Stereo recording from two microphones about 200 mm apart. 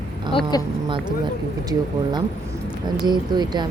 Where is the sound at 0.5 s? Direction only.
20° left (ahead or behind).